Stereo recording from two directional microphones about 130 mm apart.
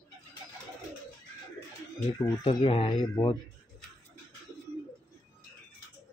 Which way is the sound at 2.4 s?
45° left (ahead or behind).